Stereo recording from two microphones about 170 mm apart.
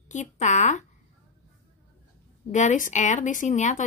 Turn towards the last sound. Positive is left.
turn(degrees=45)  # may be behind; listen again after turning